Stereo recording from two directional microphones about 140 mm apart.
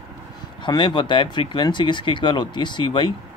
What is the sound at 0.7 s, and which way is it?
Speech, 30° left (ahead or behind).